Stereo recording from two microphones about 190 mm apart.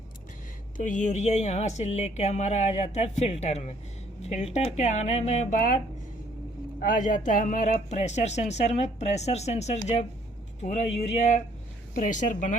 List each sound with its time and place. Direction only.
0.8 s a woman's voice: 40° left (ahead or behind)